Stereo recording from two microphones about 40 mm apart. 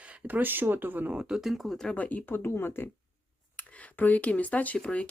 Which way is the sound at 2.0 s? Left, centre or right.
Left.